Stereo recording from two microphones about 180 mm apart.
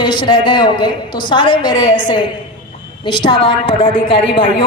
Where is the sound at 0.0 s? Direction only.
25° left (ahead or behind).